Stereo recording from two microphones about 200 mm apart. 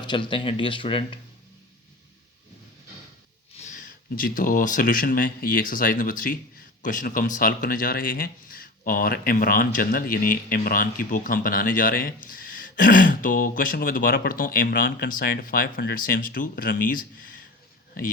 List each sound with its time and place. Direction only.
0.0 s speech: 25° left (ahead or behind)
3.6 s speech: 40° left (ahead or behind)